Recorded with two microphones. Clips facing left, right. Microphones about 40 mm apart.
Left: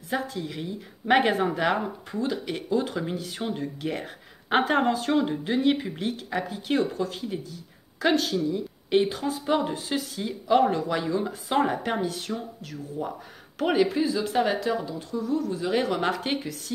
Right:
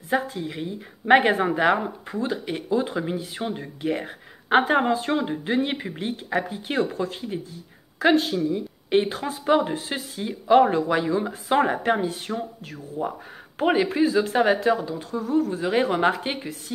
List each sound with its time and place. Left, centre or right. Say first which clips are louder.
0.1 s speech: right 4 dB; right
3.4 s speech: even; centre
5.4 s speech: left 1 dB; right
6.8 s speech: right 2 dB; right
8.1 s a woman's voice: right 3 dB; right
9.0 s speech: right 1 dB; right
13.8 s speech: right 4 dB; right